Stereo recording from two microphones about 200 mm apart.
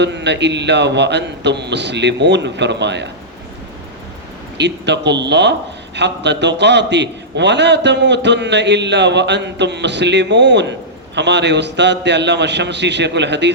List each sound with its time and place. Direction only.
0.0 s a man's voice: 60° right (ahead or behind)
4.5 s a man's voice: 60° right (ahead or behind)